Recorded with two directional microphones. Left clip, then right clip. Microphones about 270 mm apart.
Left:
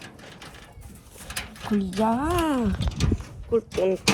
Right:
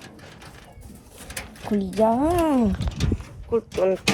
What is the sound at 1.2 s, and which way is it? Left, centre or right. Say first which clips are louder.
Bird: left 2 dB; centre.